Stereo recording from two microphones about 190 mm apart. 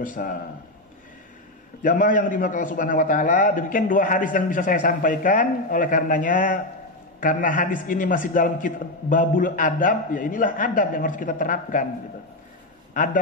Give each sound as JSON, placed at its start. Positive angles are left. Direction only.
{"t": 0.0, "sound": "a man's voice", "side_deg": 45}
{"t": 1.8, "sound": "a man's voice", "side_deg": 45}
{"t": 12.9, "sound": "a man's voice", "side_deg": 45}